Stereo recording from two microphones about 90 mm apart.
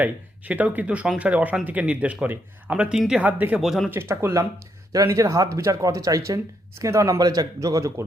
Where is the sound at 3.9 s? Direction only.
30° right (ahead or behind).